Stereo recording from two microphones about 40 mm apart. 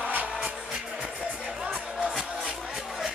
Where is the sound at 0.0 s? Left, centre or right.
Right.